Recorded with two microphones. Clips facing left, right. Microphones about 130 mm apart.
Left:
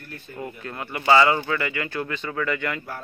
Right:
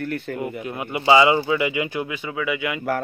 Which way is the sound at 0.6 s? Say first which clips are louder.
Right 2 dB; 15° right (ahead or behind).